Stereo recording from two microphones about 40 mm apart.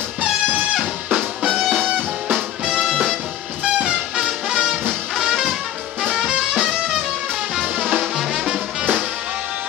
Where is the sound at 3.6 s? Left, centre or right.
Centre.